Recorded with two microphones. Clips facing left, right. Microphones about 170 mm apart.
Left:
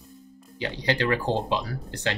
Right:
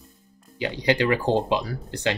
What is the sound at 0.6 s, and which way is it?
Speech, 15° right (ahead or behind).